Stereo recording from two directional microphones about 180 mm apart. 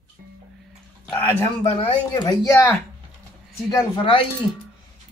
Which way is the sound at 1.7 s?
30° left (ahead or behind).